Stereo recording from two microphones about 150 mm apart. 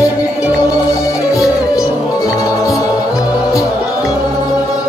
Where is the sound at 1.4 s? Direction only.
20° left (ahead or behind).